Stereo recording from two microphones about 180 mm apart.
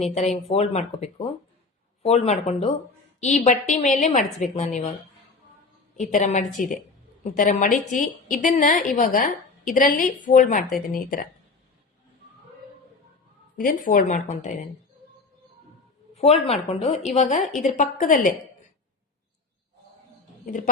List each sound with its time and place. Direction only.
0.0 s a woman's voice: 35° left (ahead or behind)
6.0 s a woman's voice: 40° left (ahead or behind)
13.6 s a woman's voice: 50° left (ahead or behind)
16.1 s a woman's voice: 35° left (ahead or behind)
20.4 s speech: 45° left (ahead or behind)